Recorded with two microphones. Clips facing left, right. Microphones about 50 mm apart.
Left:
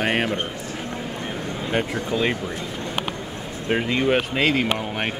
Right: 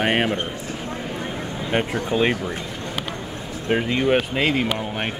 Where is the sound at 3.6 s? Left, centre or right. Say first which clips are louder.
Right 1 dB; centre.